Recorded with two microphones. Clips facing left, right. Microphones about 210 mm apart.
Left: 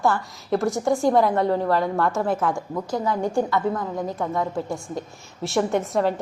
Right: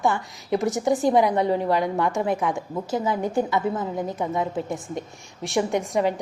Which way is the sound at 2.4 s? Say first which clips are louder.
Left 1 dB; centre (ahead or behind).